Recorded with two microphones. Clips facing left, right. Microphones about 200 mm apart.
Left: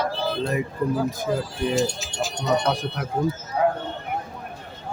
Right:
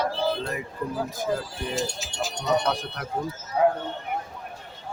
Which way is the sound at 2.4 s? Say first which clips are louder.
Left 2 dB; 10° left (ahead or behind).